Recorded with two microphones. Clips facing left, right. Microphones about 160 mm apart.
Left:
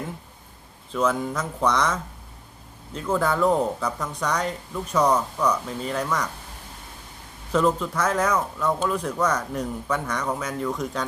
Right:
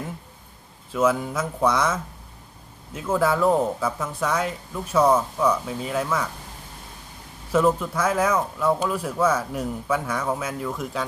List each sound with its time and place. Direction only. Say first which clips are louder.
0.9 s speech: right 2 dB; 5° right (ahead or behind)
7.5 s speech: right 1 dB; 10° right (ahead or behind)